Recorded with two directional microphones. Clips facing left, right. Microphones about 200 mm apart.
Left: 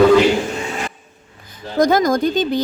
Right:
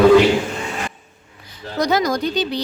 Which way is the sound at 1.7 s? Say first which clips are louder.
Left 4 dB; 50° left (ahead or behind).